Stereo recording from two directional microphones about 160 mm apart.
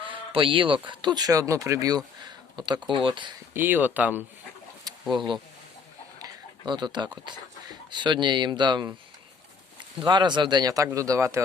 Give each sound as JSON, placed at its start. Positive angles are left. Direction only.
{"t": 0.3, "sound": "speech", "side_deg": -30}
{"t": 3.5, "sound": "speech", "side_deg": -10}
{"t": 5.1, "sound": "speech", "side_deg": -30}
{"t": 10.0, "sound": "speech", "side_deg": -30}